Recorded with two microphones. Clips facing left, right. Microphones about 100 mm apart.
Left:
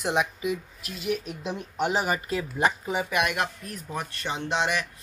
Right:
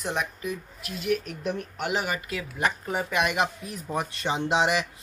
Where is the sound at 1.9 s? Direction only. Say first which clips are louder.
Even; 35° left (ahead or behind).